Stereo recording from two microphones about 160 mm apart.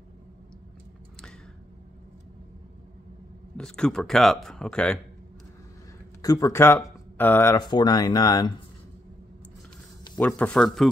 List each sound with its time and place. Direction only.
3.5 s speech: 5° left (ahead or behind)
6.2 s speech: 20° left (ahead or behind)
7.5 s speech: 25° left (ahead or behind)
10.1 s speech: 5° left (ahead or behind)